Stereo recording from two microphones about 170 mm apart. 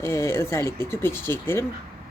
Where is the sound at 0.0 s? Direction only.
15° left (ahead or behind).